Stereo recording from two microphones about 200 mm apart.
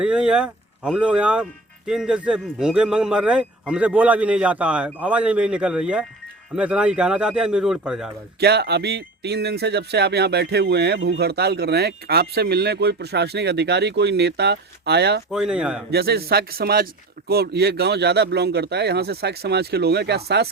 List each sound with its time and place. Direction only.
0.0 s a man's voice: 5° right (ahead or behind)
8.4 s speech: 55° right (ahead or behind)
15.3 s a man's voice: 5° right (ahead or behind)
15.9 s speech: 50° right (ahead or behind)